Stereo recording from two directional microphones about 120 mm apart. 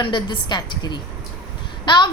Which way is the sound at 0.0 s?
40° left (ahead or behind).